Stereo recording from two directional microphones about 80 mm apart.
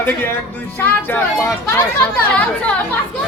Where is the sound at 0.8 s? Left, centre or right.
Left.